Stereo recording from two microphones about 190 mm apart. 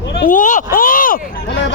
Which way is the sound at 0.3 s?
45° left (ahead or behind).